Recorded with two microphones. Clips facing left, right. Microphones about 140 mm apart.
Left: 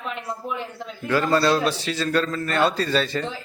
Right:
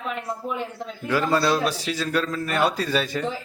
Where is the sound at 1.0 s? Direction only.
5° right (ahead or behind).